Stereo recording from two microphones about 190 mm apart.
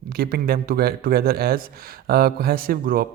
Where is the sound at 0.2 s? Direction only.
55° right (ahead or behind).